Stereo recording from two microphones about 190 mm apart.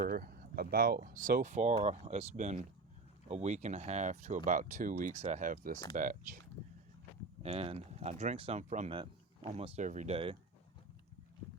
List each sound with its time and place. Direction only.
0.1 s speech: 50° right (ahead or behind)
7.4 s speech: 30° right (ahead or behind)